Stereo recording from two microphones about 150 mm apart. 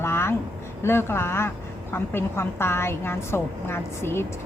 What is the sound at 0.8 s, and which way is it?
Speech, 15° left (ahead or behind).